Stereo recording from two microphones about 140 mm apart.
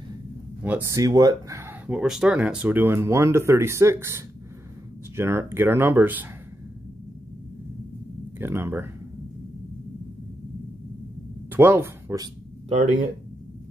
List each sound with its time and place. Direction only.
0.7 s speech: 15° right (ahead or behind)
8.4 s speech: 15° right (ahead or behind)
11.5 s speech: 15° right (ahead or behind)